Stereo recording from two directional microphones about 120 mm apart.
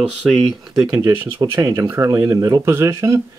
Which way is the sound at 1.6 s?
25° right (ahead or behind).